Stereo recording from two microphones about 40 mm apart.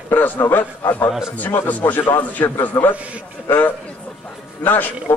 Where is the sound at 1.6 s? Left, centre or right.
Left.